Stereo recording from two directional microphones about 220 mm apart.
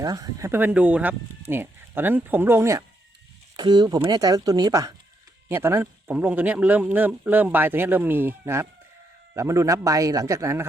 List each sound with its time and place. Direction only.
0.0 s a man's voice: 15° right (ahead or behind)